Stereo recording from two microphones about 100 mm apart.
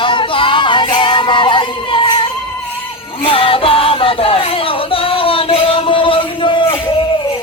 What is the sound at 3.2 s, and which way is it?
Music, 65° left (ahead or behind).